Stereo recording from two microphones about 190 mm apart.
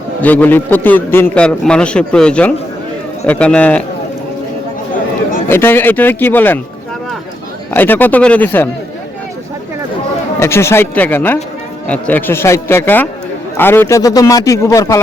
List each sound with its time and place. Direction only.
0.2 s a man's voice: 10° left (ahead or behind)
5.5 s a man's voice: 10° left (ahead or behind)
7.7 s a man's voice: 10° left (ahead or behind)
10.4 s a man's voice: 15° left (ahead or behind)